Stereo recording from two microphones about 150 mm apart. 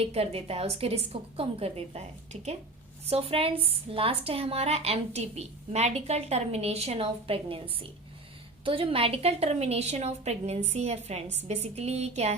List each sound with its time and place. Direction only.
0.0 s a woman's voice: 40° right (ahead or behind)